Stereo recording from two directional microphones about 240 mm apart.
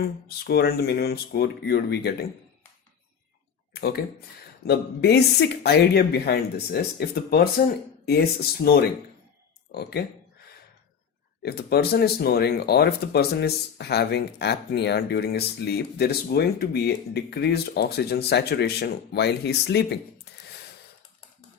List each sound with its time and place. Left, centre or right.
0.0 s speech: left
3.8 s speech: left
10.0 s speech: left
11.4 s speech: left